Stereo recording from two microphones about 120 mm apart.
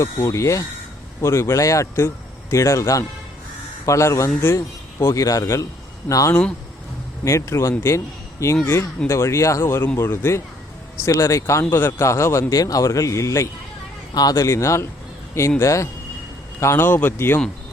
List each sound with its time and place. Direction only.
0.0 s speech: 25° left (ahead or behind)